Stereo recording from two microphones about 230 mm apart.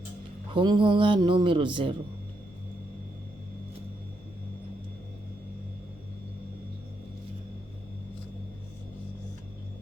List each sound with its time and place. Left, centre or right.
0.5 s speech: centre